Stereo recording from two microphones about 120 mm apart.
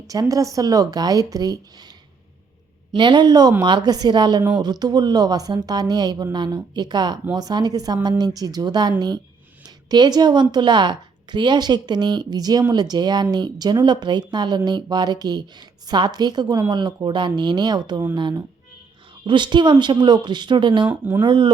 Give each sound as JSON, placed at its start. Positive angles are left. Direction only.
{"t": 0.1, "sound": "speech", "side_deg": -30}
{"t": 2.9, "sound": "a woman's voice", "side_deg": -40}
{"t": 20.8, "sound": "speech", "side_deg": -15}
{"t": 21.2, "sound": "speech", "side_deg": -40}